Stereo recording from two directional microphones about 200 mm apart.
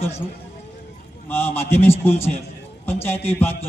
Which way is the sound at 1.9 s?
30° left (ahead or behind).